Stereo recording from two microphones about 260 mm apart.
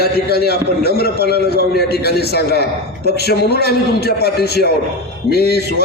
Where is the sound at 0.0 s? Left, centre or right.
Left.